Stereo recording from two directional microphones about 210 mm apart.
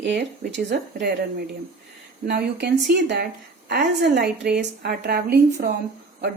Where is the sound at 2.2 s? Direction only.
50° right (ahead or behind).